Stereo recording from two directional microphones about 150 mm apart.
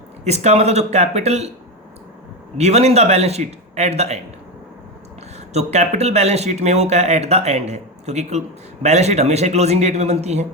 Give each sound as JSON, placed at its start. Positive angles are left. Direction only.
{"t": 0.3, "sound": "speech", "side_deg": -45}
{"t": 2.6, "sound": "speech", "side_deg": -45}
{"t": 5.5, "sound": "speech", "side_deg": -50}